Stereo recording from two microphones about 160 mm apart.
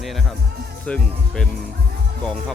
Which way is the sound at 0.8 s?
5° left (ahead or behind).